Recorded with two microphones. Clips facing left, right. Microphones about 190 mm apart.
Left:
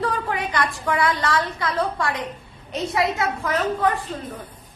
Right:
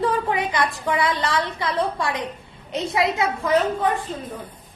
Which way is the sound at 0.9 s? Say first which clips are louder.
Left 2 dB; 20° right (ahead or behind).